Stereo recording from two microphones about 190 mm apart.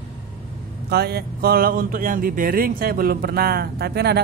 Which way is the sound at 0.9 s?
55° right (ahead or behind).